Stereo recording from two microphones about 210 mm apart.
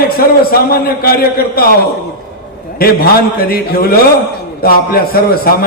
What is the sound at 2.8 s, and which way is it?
A man's voice, 45° left (ahead or behind).